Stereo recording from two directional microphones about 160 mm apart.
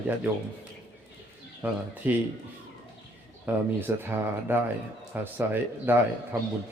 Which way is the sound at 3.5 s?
10° right (ahead or behind).